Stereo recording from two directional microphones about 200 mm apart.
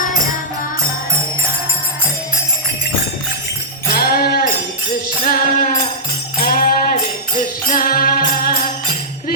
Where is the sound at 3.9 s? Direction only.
50° left (ahead or behind).